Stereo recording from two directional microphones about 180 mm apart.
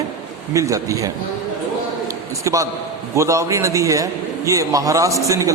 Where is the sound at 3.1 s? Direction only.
15° right (ahead or behind).